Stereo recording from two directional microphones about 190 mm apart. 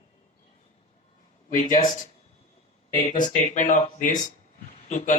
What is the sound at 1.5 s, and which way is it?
Speech, 45° left (ahead or behind).